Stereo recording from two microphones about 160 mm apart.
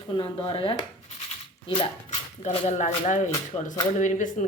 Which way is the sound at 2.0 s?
50° left (ahead or behind).